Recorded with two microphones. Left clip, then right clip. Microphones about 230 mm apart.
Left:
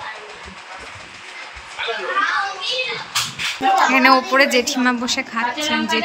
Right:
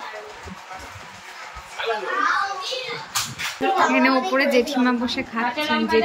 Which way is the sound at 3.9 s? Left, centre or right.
Centre.